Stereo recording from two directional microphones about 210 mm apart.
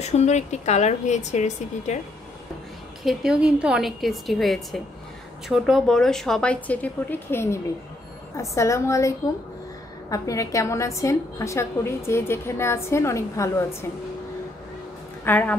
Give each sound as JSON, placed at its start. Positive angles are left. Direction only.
{"t": 0.0, "sound": "a woman's voice", "side_deg": 30}
{"t": 3.0, "sound": "a woman's voice", "side_deg": 0}
{"t": 15.2, "sound": "a woman's voice", "side_deg": 5}